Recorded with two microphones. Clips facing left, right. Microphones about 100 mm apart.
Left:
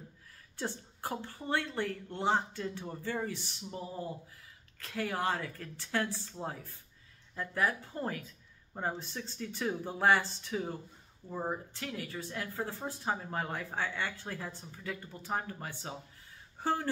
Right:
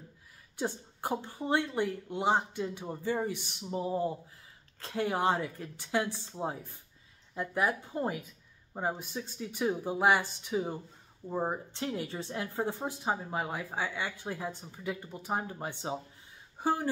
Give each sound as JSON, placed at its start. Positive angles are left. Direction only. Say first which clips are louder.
{"t": 0.6, "sound": "a woman's voice", "louder": "right 4 dB", "side_deg": -15}